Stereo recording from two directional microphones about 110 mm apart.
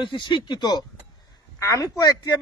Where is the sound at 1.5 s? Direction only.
30° left (ahead or behind).